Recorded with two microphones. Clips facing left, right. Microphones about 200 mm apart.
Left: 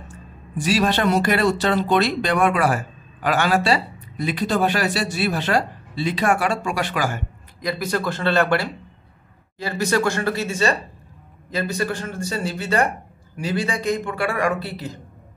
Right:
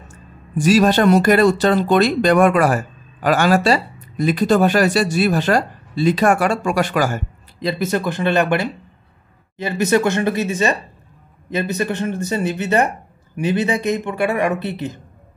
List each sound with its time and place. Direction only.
0.1 s speech: 45° right (ahead or behind)
7.6 s speech: 20° right (ahead or behind)